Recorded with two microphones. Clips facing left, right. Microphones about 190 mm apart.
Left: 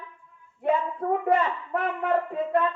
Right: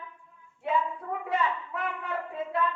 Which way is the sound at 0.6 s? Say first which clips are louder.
Left 4 dB; 55° left (ahead or behind).